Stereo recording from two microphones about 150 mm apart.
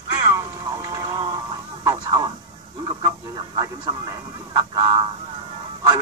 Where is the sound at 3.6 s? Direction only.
25° right (ahead or behind).